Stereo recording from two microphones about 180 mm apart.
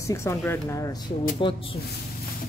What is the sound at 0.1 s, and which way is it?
Speech, 15° left (ahead or behind).